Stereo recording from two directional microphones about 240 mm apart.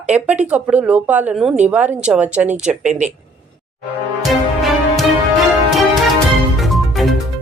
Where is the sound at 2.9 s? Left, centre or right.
Right.